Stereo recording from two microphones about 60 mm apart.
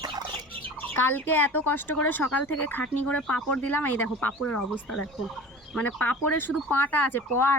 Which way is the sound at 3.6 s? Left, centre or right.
Left.